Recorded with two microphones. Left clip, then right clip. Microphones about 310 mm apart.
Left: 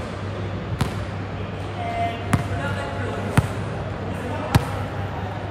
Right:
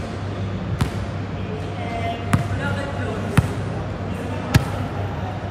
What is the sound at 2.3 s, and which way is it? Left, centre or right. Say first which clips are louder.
Basketball bounce: right 1 dB; left.